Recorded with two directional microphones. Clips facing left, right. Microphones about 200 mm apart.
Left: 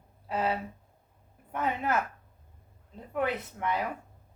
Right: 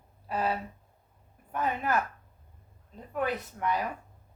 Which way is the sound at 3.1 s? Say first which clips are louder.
Left 1 dB; 20° left (ahead or behind).